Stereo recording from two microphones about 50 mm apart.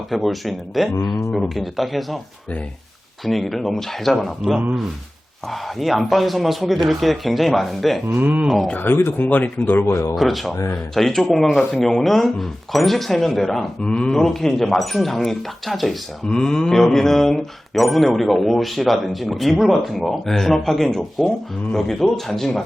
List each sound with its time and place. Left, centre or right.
0.1 s speech: centre
3.2 s speech: centre
8.2 s speech: right
8.8 s speech: left
9.8 s speech: left
10.2 s speech: centre
13.8 s speech: centre
16.3 s speech: centre